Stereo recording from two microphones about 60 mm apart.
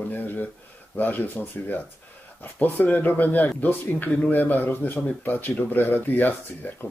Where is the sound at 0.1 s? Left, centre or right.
Left.